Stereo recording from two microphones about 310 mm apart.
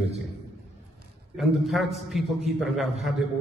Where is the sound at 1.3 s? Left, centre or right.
Centre.